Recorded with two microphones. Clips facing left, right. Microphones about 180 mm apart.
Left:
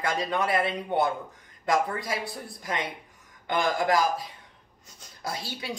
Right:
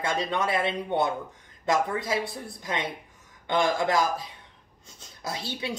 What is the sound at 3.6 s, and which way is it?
Speech, 25° right (ahead or behind).